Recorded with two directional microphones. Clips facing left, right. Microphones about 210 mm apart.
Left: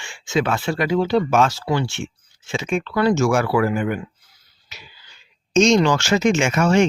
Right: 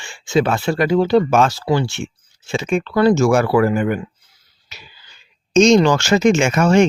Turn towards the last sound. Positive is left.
turn(degrees=-45)  # may be behind; listen again after turning